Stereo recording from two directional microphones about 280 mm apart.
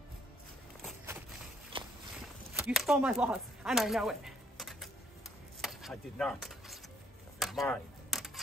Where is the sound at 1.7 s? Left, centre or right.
Centre.